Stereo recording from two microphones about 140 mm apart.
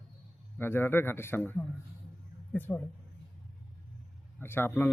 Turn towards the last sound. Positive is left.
turn(degrees=15)  # may be behind; listen again after turning